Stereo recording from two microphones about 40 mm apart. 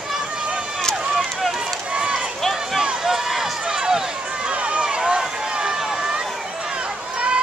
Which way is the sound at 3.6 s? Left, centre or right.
Centre.